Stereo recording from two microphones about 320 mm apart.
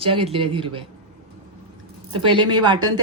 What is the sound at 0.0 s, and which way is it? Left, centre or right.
Speech, centre.